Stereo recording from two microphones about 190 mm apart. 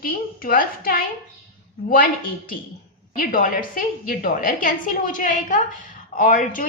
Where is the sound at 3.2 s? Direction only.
45° left (ahead or behind).